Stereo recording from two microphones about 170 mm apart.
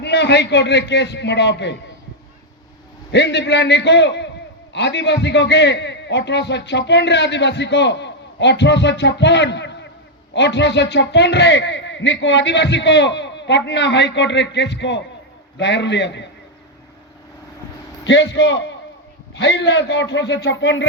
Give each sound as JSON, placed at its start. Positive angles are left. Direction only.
{"t": 0.0, "sound": "a man's voice", "side_deg": 75}
{"t": 3.1, "sound": "a man's voice", "side_deg": 85}
{"t": 18.0, "sound": "a man's voice", "side_deg": 90}